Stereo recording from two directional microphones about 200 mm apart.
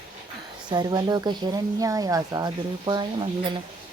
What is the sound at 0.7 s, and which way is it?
Speech, 20° right (ahead or behind).